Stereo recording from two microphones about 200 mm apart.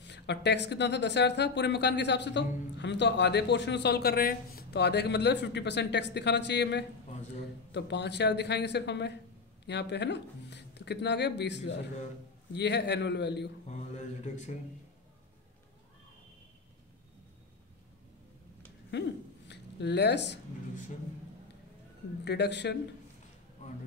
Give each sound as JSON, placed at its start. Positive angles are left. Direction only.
{"t": 0.0, "sound": "speech", "side_deg": 60}
{"t": 13.7, "sound": "mantra", "side_deg": 35}
{"t": 18.9, "sound": "a sound", "side_deg": 60}
{"t": 22.2, "sound": "speech", "side_deg": 55}